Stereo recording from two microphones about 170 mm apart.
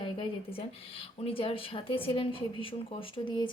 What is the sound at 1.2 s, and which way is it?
A woman's voice, 35° left (ahead or behind).